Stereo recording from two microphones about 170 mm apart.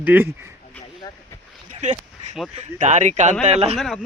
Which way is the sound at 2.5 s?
40° right (ahead or behind).